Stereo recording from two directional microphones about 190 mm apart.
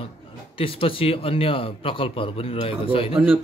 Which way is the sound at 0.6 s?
30° left (ahead or behind).